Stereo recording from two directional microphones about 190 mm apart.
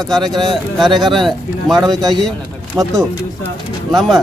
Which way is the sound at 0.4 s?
Centre (ahead or behind).